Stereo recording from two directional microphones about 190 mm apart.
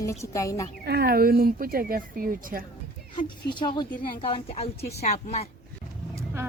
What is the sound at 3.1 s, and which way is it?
Speech, 25° left (ahead or behind).